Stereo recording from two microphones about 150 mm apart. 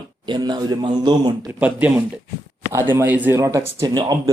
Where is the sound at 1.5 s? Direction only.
10° right (ahead or behind).